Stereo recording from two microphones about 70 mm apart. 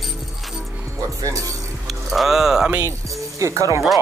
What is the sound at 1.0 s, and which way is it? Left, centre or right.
Speech, right.